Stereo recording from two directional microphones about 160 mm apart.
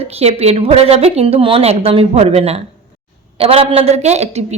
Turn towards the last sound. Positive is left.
turn(degrees=-45)  # may be behind; listen again after turning